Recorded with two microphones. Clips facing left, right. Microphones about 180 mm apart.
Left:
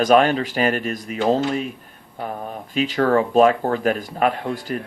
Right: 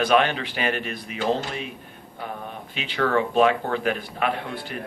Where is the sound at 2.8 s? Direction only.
40° left (ahead or behind).